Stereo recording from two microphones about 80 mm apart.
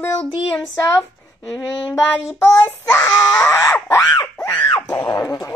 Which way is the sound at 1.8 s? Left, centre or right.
Left.